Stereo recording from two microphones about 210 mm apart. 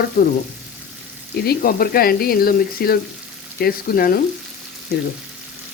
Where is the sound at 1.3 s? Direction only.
50° left (ahead or behind).